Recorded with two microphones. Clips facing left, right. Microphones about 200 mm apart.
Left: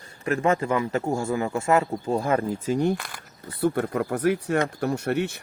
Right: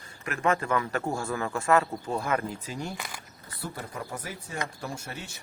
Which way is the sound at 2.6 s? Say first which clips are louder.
Left 12 dB; 55° left (ahead or behind).